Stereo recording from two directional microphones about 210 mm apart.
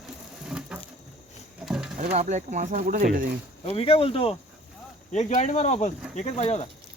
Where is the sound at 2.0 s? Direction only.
35° right (ahead or behind).